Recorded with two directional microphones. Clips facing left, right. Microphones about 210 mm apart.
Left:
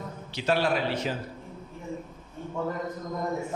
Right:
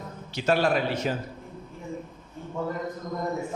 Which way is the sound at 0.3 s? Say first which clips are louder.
Right 2 dB; 50° right (ahead or behind).